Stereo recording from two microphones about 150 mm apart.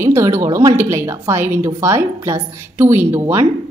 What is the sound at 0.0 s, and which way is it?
A woman's voice, 20° right (ahead or behind).